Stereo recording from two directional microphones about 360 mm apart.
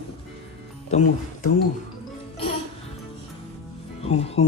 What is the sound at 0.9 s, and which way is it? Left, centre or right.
Speech, centre.